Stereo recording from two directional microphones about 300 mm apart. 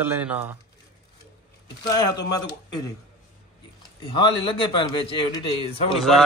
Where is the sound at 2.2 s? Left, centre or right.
Centre.